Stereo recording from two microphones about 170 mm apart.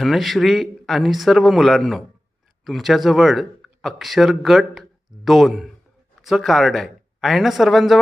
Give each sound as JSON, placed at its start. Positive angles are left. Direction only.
{"t": 0.0, "sound": "a man's voice", "side_deg": 0}